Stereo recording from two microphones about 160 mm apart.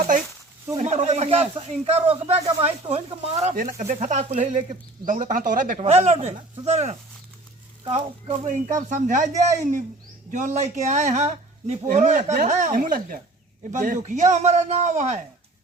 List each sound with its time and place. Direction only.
0.8 s speech: 45° right (ahead or behind)
3.5 s a man's voice: 60° right (ahead or behind)
5.8 s a man's voice: 45° right (ahead or behind)
8.4 s a man's voice: 50° right (ahead or behind)
10.3 s a man's voice: 45° right (ahead or behind)